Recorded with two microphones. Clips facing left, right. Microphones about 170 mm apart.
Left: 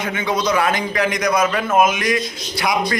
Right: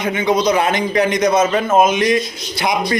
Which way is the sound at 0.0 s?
20° right (ahead or behind).